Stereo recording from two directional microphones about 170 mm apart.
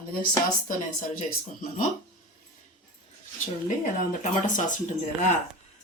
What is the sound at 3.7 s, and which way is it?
Speech, 50° left (ahead or behind).